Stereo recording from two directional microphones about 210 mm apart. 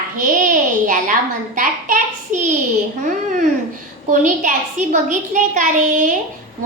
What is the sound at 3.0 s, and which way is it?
A woman's voice, 40° right (ahead or behind).